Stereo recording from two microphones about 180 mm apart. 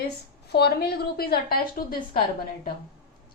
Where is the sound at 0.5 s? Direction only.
65° left (ahead or behind).